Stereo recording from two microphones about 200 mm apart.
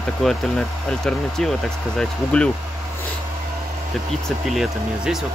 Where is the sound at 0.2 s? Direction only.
Centre (ahead or behind).